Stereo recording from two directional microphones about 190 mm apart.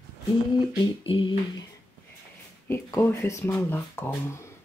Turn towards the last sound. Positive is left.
turn(degrees=10)  # may be behind; listen again after turning